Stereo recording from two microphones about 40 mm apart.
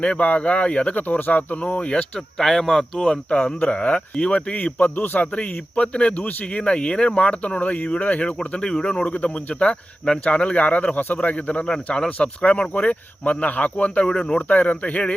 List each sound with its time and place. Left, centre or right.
0.0 s speech: left
2.1 s speech: centre
3.2 s speech: left
8.4 s speech: centre
9.0 s speech: left
14.0 s speech: left
14.3 s speech: left